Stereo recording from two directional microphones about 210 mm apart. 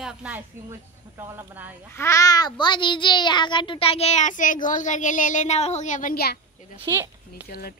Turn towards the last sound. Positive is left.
turn(degrees=45)  # may be behind; listen again after turning